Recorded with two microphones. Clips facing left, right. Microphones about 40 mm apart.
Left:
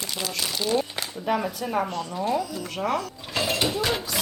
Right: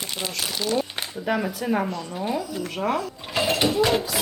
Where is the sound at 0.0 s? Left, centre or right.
Right.